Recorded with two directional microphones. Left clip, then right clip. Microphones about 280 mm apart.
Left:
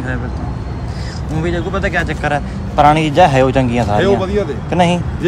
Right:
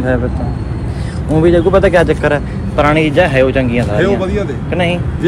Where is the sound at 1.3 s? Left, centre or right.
Centre.